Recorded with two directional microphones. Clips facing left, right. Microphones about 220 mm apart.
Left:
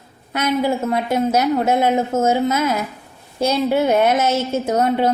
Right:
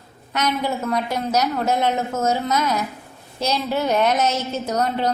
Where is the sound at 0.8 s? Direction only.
25° left (ahead or behind).